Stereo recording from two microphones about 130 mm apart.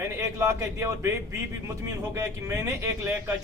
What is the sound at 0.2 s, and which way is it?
Speech, 20° right (ahead or behind).